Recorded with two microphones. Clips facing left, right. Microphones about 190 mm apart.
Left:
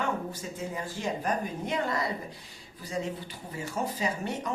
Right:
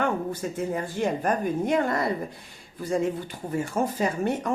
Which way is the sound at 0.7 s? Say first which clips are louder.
Right 6 dB; 55° right (ahead or behind).